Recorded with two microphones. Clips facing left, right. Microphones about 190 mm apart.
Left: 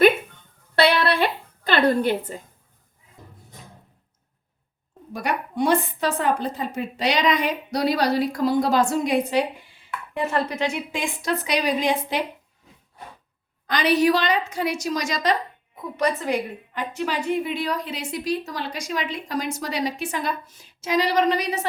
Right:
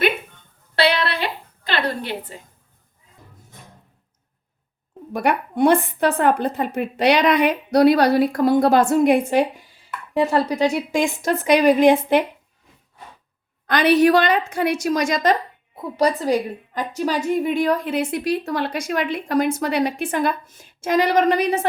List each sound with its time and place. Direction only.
1.1 s a sound: 50° left (ahead or behind)
5.1 s a woman's voice: 60° right (ahead or behind)
10.2 s a woman's voice: 35° right (ahead or behind); by 12.2 s 55° right (ahead or behind)
13.7 s a woman's voice: 60° right (ahead or behind)
15.7 s a woman's voice: 35° right (ahead or behind); by 21.7 s 55° right (ahead or behind)